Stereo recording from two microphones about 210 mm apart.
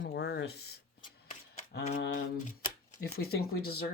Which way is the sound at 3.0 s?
50° left (ahead or behind).